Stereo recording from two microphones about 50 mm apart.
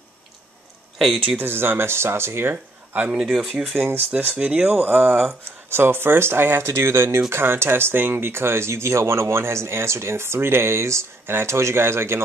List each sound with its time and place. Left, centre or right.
1.4 s speech: right
2.5 s a sound: right
3.3 s speech: centre
3.7 s speech: right
4.4 s speech: right
4.6 s speech: right
5.7 s speech: right